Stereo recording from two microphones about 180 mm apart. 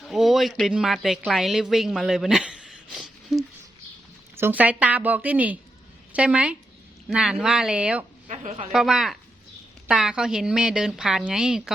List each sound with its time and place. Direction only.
0.0 s speech: centre (ahead or behind)
4.4 s a woman's voice: 10° right (ahead or behind)
8.3 s a woman's voice: 35° right (ahead or behind)
8.7 s a woman's voice: centre (ahead or behind)